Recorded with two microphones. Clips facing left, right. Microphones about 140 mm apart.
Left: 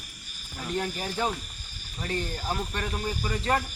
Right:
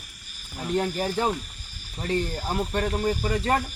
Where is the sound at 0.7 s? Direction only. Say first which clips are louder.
Right 6 dB; 35° right (ahead or behind).